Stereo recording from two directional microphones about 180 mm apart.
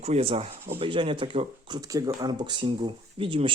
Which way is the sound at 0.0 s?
35° right (ahead or behind).